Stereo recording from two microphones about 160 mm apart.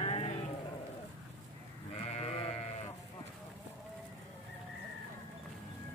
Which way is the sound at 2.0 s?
40° left (ahead or behind).